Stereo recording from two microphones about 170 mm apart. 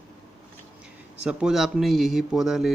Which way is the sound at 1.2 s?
5° right (ahead or behind).